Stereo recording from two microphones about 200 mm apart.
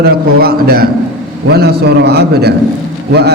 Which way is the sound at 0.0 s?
50° right (ahead or behind).